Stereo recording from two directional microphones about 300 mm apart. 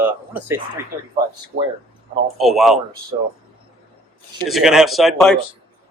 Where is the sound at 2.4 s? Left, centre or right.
Centre.